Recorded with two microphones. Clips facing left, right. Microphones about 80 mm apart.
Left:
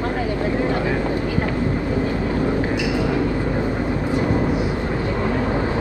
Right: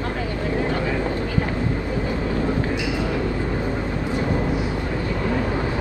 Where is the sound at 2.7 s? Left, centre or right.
Left.